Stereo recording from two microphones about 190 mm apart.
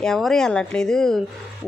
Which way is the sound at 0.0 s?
Centre (ahead or behind).